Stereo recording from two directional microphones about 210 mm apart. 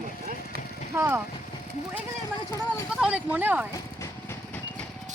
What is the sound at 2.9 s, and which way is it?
Speech, 5° right (ahead or behind).